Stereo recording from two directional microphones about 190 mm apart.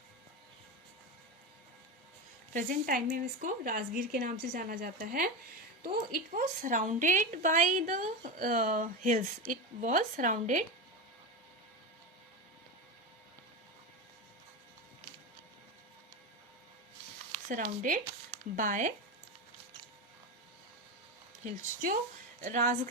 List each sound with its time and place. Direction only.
2.5 s a woman's voice: 45° right (ahead or behind)
17.5 s a woman's voice: 45° right (ahead or behind)
21.4 s a woman's voice: 45° right (ahead or behind)